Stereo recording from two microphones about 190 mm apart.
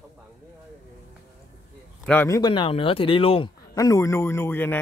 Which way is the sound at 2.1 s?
15° left (ahead or behind).